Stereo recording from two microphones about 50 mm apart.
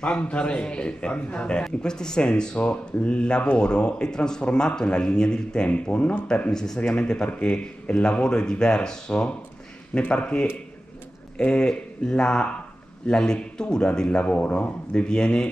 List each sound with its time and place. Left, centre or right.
0.0 s a man's voice: left
5.7 s a man's voice: left
6.5 s a man's voice: centre
7.2 s a man's voice: left
14.9 s a man's voice: centre